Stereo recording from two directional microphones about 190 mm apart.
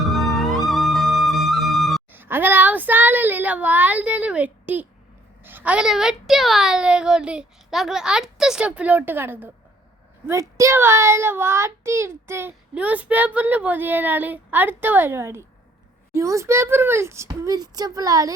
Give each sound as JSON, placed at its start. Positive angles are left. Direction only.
{"t": 0.0, "sound": "music", "side_deg": 0}
{"t": 2.1, "sound": "child singing", "side_deg": -10}
{"t": 5.4, "sound": "a child's voice", "side_deg": -10}